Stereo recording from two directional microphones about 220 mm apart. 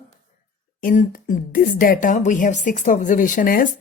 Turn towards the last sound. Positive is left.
turn(degrees=40)  # may be behind; listen again after turning